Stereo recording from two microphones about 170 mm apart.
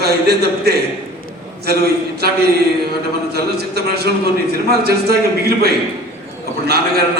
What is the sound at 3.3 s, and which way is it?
A man's voice, 70° right (ahead or behind).